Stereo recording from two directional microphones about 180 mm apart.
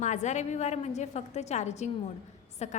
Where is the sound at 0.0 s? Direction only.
40° left (ahead or behind).